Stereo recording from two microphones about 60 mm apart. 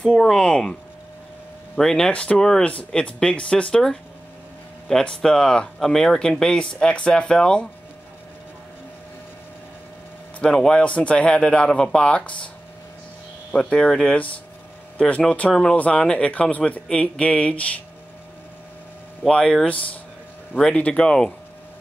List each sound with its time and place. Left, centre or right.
0.1 s a man's voice: centre
1.8 s a man's voice: centre
10.4 s a man's voice: centre
13.5 s speech: centre
19.3 s a man's voice: centre
20.7 s speech: left